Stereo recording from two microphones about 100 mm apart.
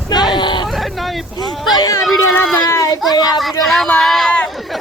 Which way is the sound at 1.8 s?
40° left (ahead or behind).